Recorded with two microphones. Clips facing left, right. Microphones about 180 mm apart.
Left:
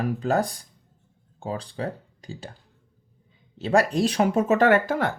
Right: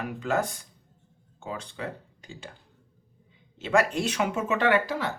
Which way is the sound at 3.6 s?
35° left (ahead or behind).